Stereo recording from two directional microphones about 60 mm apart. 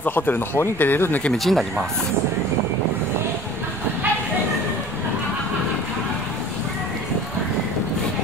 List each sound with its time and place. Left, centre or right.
0.0 s speech: left
1.3 s speech: centre